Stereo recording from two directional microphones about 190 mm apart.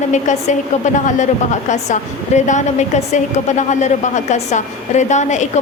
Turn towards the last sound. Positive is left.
turn(degrees=40)  # may be behind; listen again after turning